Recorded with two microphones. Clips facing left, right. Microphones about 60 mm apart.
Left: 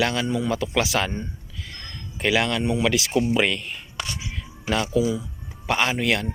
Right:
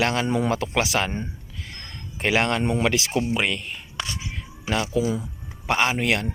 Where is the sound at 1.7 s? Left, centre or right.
Right.